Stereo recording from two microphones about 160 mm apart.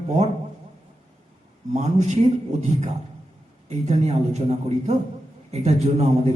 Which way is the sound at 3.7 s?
45° right (ahead or behind).